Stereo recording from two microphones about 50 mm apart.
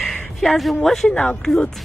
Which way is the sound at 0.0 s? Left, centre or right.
Centre.